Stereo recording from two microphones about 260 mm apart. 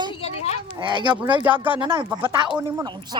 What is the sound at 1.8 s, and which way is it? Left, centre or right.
A woman's voice, centre.